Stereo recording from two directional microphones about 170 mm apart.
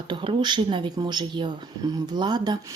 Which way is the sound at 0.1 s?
30° right (ahead or behind).